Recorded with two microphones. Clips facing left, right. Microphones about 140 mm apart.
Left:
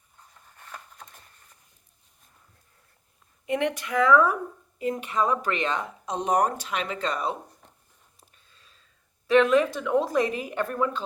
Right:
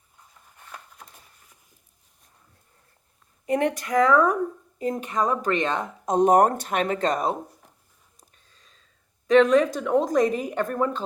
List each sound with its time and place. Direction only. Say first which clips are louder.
0.5 s a sound: even; 10° right (ahead or behind)
3.4 s speech: right 3 dB; 40° right (ahead or behind)
9.6 s speech: right 2 dB; 40° right (ahead or behind)